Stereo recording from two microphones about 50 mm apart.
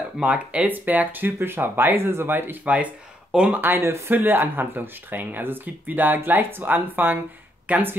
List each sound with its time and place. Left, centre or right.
0.2 s speech: right
0.7 s speech: right
1.4 s speech: right
2.6 s speech: right
3.5 s speech: right
7.7 s speech: right